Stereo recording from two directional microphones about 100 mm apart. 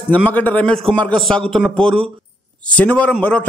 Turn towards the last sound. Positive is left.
turn(degrees=15)  # may be behind; listen again after turning